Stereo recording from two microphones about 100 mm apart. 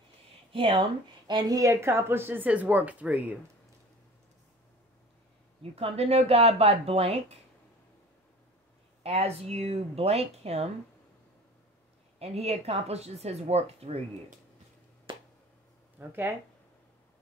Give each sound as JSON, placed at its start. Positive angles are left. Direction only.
{"t": 0.5, "sound": "speech", "side_deg": -60}
{"t": 5.6, "sound": "speech", "side_deg": -80}
{"t": 9.0, "sound": "a woman's voice", "side_deg": -90}
{"t": 12.2, "sound": "a woman's voice", "side_deg": -90}
{"t": 15.1, "sound": "finger snapping", "side_deg": -60}
{"t": 16.0, "sound": "speech", "side_deg": -20}